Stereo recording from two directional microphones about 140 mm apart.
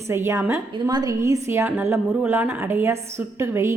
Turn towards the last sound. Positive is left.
turn(degrees=-20)  # may be behind; listen again after turning